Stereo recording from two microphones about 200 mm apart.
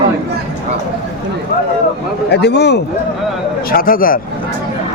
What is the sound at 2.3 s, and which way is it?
Speech, 55° left (ahead or behind).